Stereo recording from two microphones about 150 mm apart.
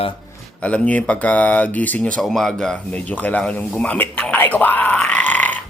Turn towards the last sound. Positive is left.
turn(degrees=10)  # may be behind; listen again after turning